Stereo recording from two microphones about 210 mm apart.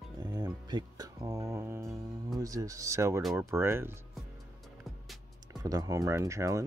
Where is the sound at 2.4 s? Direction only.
15° right (ahead or behind).